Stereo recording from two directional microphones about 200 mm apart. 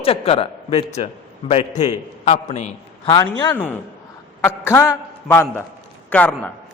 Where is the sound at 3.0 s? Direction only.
20° left (ahead or behind).